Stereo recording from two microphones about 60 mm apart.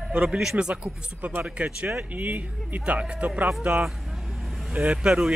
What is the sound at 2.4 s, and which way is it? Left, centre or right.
Speech, right.